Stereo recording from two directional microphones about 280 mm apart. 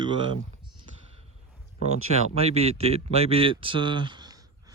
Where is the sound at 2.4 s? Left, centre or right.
Right.